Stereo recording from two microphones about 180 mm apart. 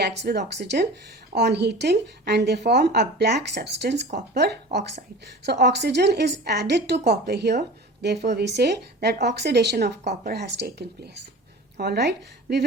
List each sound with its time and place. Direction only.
0.0 s a woman's voice: 70° right (ahead or behind)